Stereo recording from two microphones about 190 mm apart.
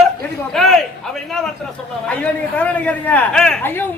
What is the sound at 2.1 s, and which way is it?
A man's voice, 5° left (ahead or behind).